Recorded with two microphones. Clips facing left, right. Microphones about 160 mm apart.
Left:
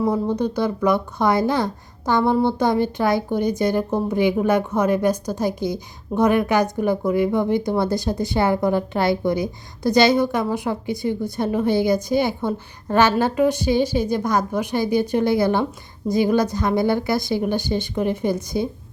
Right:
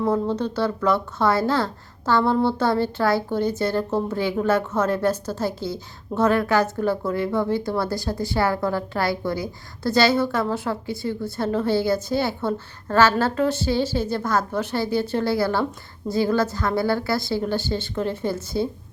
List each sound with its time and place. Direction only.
0.0 s a woman's voice: 15° left (ahead or behind)